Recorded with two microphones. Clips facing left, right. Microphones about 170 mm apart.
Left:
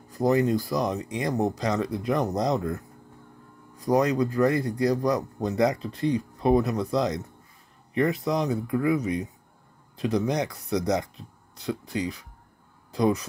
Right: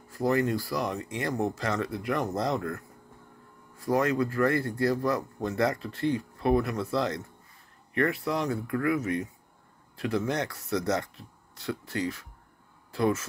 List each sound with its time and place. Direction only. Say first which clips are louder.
0.1 s a man's voice: left 4 dB; 20° left (ahead or behind)